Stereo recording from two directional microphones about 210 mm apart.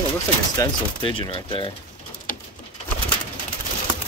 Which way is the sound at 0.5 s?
20° left (ahead or behind).